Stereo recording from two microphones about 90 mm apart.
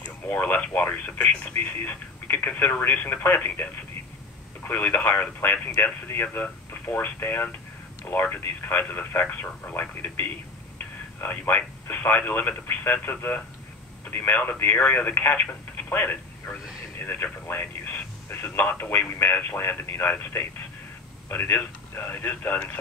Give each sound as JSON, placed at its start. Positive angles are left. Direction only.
{"t": 0.3, "sound": "speech", "side_deg": 20}
{"t": 4.6, "sound": "speech", "side_deg": 20}